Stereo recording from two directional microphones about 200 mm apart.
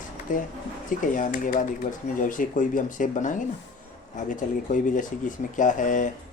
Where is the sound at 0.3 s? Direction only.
40° left (ahead or behind).